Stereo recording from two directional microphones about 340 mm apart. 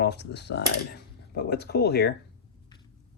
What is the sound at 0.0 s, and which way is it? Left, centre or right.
Speech, left.